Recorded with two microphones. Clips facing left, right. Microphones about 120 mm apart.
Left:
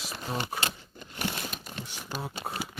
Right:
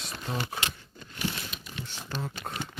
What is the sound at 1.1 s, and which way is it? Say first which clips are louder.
Crumpling: left 1 dB; 45° left (ahead or behind).